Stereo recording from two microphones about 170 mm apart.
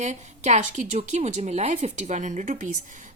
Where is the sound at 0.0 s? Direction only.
45° right (ahead or behind).